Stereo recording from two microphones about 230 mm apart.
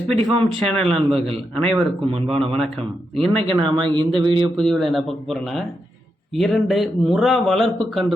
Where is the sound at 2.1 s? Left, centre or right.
Right.